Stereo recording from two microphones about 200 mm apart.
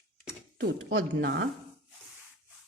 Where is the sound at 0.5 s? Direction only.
55° right (ahead or behind).